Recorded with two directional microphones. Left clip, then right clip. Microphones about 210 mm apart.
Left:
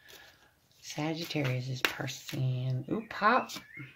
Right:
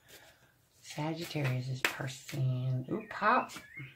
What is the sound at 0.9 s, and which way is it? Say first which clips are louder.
Speech: left 3 dB; 45° left (ahead or behind).